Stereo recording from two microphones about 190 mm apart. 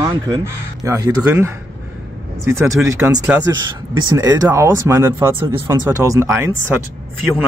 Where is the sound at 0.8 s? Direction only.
15° right (ahead or behind).